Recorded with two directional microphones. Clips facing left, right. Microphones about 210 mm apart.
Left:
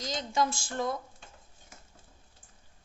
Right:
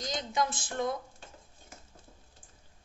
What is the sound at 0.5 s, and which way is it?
Speech, 20° right (ahead or behind).